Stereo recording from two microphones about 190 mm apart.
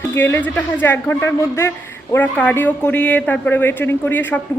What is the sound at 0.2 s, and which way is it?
Speech, 10° left (ahead or behind).